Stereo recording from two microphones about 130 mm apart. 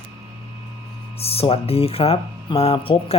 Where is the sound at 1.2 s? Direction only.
50° left (ahead or behind).